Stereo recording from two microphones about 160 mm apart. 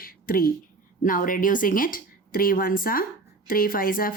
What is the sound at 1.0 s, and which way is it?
Speech, 60° left (ahead or behind).